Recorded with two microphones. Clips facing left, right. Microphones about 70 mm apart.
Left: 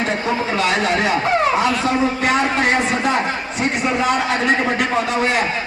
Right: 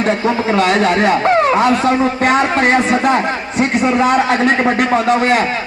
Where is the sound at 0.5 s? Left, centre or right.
Right.